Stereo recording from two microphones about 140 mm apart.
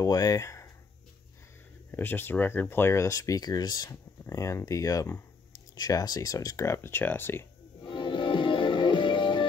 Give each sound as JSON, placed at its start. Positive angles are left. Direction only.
{"t": 0.0, "sound": "speech", "side_deg": 25}
{"t": 1.9, "sound": "speech", "side_deg": 15}
{"t": 7.8, "sound": "music", "side_deg": 35}